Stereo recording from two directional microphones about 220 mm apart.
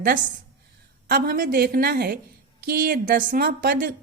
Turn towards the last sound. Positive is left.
turn(degrees=-40)  # may be behind; listen again after turning